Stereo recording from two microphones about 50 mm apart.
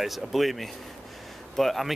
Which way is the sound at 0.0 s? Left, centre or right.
Centre.